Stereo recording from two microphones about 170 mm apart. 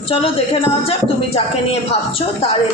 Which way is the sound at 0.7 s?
35° left (ahead or behind).